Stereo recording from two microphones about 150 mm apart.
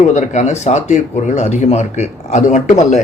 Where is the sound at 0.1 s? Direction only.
50° left (ahead or behind).